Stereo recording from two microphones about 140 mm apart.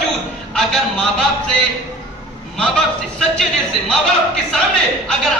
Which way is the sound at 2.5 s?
5° left (ahead or behind).